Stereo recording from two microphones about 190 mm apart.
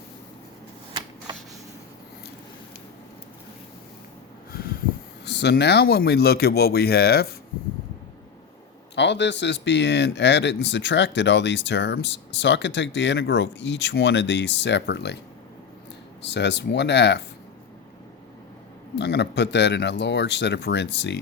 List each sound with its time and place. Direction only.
5.2 s speech: 65° left (ahead or behind)
9.0 s speech: 65° left (ahead or behind)
16.2 s speech: 65° left (ahead or behind)
18.9 s speech: 65° left (ahead or behind)